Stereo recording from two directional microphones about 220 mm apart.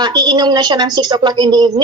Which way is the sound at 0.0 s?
20° right (ahead or behind).